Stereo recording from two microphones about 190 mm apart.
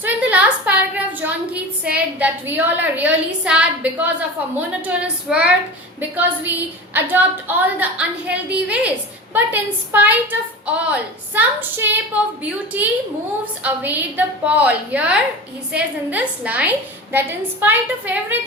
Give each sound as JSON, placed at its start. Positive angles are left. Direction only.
{"t": 0.0, "sound": "a sound", "side_deg": -5}
{"t": 4.9, "sound": "female singing", "side_deg": -5}
{"t": 6.0, "sound": "a woman's voice", "side_deg": -10}